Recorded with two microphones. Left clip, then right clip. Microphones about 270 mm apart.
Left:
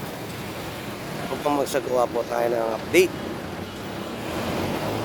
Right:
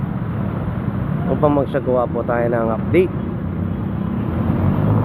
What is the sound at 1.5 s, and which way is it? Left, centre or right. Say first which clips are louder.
Speech: right 3 dB; left.